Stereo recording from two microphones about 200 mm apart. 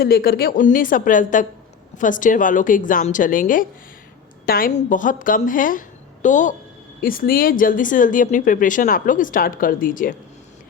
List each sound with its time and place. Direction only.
0.0 s a woman's voice: 50° left (ahead or behind)